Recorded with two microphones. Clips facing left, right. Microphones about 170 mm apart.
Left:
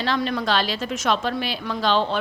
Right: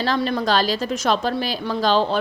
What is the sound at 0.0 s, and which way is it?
A woman's voice, 35° right (ahead or behind).